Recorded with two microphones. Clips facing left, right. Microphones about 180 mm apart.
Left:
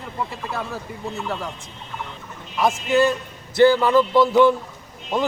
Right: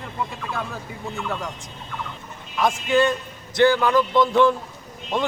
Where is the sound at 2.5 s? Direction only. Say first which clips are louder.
Left 1 dB; 5° left (ahead or behind).